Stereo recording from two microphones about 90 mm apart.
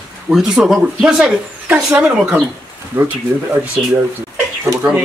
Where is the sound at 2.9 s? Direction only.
25° right (ahead or behind).